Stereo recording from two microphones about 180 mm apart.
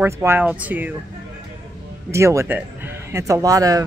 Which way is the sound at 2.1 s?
15° right (ahead or behind).